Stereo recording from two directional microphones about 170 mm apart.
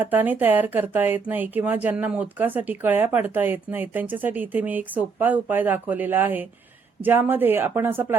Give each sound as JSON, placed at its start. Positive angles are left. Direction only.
{"t": 0.0, "sound": "speech", "side_deg": -10}